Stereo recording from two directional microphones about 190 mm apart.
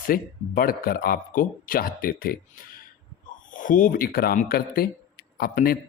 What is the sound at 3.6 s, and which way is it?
Speech, 45° left (ahead or behind).